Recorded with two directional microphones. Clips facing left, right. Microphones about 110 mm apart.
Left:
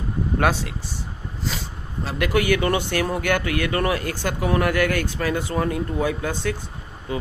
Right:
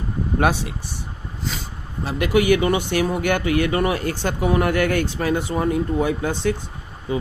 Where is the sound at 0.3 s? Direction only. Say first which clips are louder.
Right 2 dB; 20° right (ahead or behind).